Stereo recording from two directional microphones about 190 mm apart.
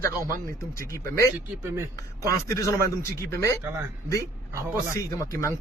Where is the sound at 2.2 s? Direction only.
15° left (ahead or behind).